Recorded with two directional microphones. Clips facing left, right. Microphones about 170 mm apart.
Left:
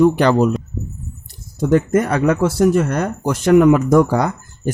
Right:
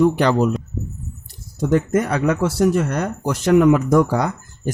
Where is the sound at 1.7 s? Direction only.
50° left (ahead or behind).